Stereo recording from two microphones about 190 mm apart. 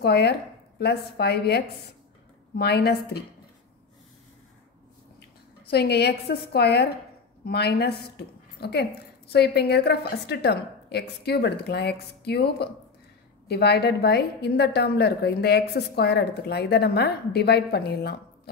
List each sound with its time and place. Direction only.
0.0 s a woman's voice: 60° left (ahead or behind)
5.7 s a woman's voice: 60° left (ahead or behind)